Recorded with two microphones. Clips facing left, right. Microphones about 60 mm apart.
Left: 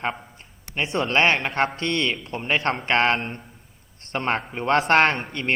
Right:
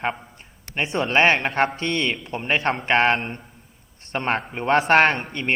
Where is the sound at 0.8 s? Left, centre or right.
Centre.